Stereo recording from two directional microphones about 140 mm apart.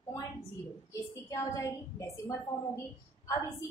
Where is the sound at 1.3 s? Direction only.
20° left (ahead or behind).